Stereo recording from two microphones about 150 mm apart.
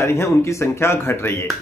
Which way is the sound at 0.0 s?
15° left (ahead or behind).